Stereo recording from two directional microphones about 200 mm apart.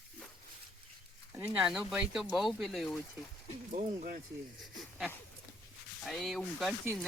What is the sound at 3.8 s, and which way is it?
Speech, 40° right (ahead or behind).